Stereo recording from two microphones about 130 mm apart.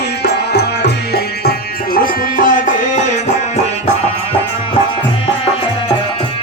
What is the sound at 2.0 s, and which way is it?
Music, 90° left.